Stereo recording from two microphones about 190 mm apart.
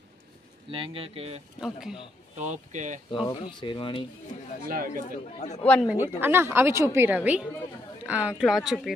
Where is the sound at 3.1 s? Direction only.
25° left (ahead or behind).